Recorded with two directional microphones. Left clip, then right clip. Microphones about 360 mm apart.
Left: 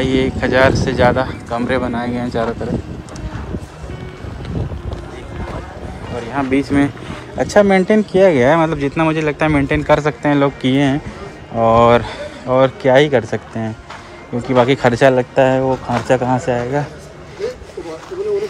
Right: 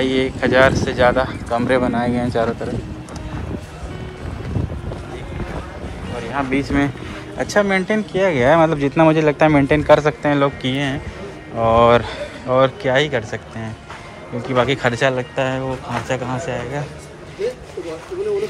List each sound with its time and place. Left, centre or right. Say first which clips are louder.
0.0 s speech: left 2 dB; centre
6.3 s speech: left 3 dB; centre